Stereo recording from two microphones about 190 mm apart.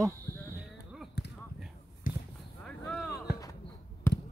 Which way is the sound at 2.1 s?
45° left (ahead or behind).